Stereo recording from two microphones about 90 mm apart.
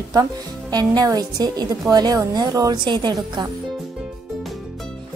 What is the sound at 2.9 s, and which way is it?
Speech, 55° right (ahead or behind).